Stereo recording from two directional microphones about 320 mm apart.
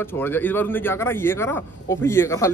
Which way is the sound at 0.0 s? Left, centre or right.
Centre.